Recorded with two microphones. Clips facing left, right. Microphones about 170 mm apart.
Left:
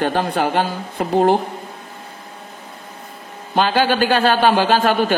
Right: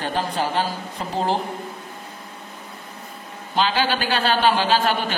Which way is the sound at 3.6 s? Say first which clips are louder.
Left 5 dB; 50° left (ahead or behind).